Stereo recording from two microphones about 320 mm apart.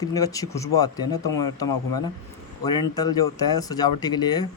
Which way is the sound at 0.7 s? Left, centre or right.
Left.